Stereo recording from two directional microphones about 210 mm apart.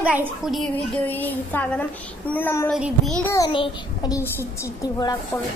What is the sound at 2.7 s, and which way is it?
Speech, centre (ahead or behind).